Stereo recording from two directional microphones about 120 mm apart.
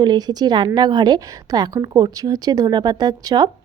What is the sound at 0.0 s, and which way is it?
A woman's voice, 35° right (ahead or behind).